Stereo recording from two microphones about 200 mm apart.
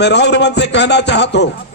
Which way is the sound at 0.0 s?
60° left (ahead or behind).